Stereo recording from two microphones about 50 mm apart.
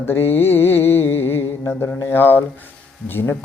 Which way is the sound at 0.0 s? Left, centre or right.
Left.